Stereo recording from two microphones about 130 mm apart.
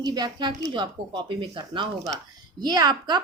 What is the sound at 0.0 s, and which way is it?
Speech, 35° right (ahead or behind).